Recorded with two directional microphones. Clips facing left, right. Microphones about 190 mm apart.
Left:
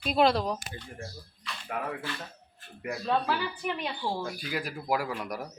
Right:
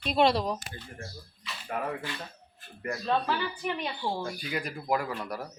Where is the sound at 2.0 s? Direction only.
15° right (ahead or behind).